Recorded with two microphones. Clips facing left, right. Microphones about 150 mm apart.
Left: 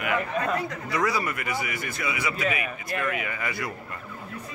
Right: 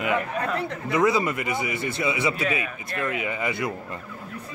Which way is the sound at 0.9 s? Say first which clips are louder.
Right 6 dB; 20° right (ahead or behind).